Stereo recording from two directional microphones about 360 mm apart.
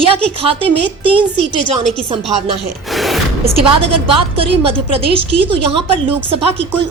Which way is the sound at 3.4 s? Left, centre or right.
Centre.